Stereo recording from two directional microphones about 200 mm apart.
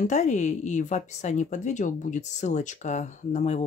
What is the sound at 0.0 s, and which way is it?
A woman's voice, 35° left (ahead or behind).